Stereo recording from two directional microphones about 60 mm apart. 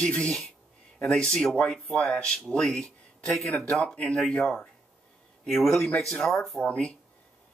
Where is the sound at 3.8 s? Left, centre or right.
Left.